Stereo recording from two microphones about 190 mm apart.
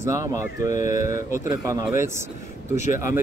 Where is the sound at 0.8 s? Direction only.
45° left (ahead or behind).